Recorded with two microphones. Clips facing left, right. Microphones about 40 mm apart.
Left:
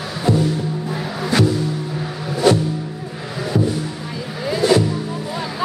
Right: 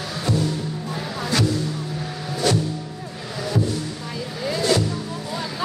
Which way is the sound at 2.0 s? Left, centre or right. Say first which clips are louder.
Left 7 dB; centre.